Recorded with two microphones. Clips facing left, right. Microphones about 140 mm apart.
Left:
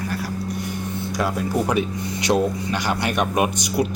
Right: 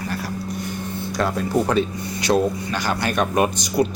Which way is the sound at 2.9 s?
20° left (ahead or behind).